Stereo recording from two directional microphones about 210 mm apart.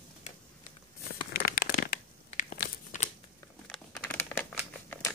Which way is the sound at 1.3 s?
45° left (ahead or behind).